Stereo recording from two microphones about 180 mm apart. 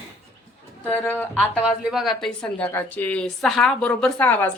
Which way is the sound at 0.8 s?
10° left (ahead or behind).